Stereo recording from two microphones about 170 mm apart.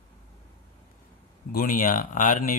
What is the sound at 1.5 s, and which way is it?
Speech, 55° left (ahead or behind).